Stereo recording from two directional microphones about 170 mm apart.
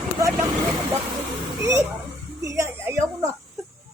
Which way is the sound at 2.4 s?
20° right (ahead or behind).